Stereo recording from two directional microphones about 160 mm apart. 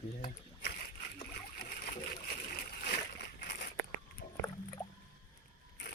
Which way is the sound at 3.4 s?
90° left.